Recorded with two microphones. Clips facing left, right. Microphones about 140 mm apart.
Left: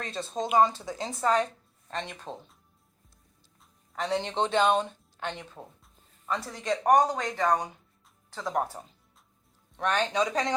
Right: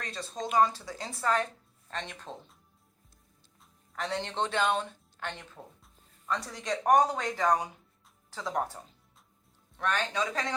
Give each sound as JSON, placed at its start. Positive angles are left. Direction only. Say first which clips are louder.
{"t": 0.0, "sound": "speech", "louder": "left 4 dB", "side_deg": 25}
{"t": 3.9, "sound": "speech", "louder": "left 4 dB", "side_deg": 15}
{"t": 9.7, "sound": "speech", "louder": "left 4 dB", "side_deg": 20}